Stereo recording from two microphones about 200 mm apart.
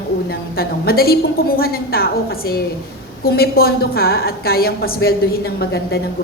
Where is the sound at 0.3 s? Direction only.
50° left (ahead or behind).